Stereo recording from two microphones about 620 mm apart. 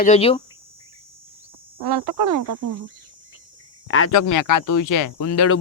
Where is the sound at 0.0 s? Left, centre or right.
Centre.